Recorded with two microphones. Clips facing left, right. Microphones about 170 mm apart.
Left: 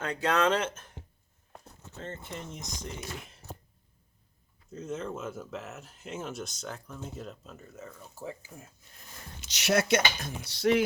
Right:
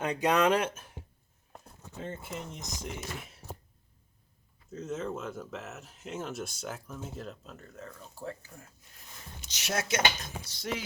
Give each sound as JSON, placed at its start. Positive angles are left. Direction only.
{"t": 0.0, "sound": "speech", "side_deg": -15}
{"t": 2.0, "sound": "speech", "side_deg": -10}
{"t": 4.7, "sound": "speech", "side_deg": 0}
{"t": 9.5, "sound": "speech", "side_deg": 75}